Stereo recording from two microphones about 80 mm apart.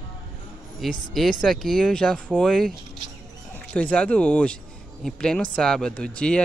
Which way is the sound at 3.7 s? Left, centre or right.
Centre.